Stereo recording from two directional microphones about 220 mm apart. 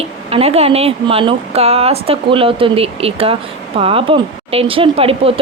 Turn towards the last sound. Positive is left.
turn(degrees=-25)  # may be behind; listen again after turning